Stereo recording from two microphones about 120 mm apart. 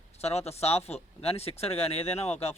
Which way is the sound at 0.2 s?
60° left (ahead or behind).